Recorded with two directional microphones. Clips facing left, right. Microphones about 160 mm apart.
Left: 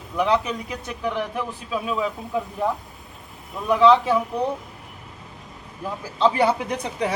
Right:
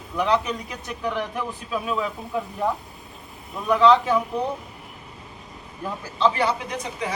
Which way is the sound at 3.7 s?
10° left (ahead or behind).